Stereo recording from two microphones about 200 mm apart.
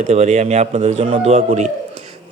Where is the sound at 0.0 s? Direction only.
35° right (ahead or behind).